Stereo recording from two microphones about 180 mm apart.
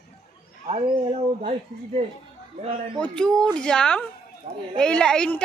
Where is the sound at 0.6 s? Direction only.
35° right (ahead or behind).